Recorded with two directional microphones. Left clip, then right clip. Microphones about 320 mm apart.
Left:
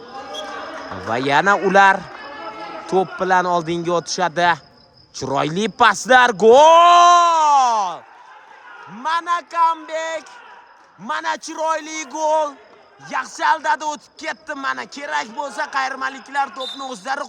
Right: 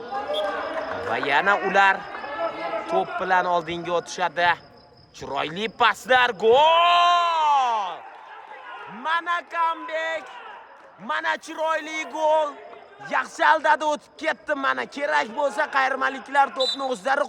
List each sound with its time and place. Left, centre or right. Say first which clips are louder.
1.1 s a man's voice: left 5 dB; centre
9.0 s a man's voice: left 4 dB; centre